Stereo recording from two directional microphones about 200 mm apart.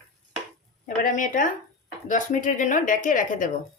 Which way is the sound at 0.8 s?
40° left (ahead or behind).